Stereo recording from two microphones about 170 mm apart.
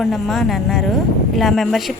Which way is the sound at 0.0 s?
Centre (ahead or behind).